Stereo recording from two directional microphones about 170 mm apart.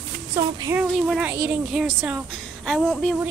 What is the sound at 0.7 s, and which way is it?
A woman's voice, 5° right (ahead or behind).